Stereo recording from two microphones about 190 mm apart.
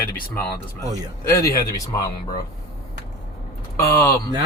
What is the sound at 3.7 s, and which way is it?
Speech, 15° left (ahead or behind).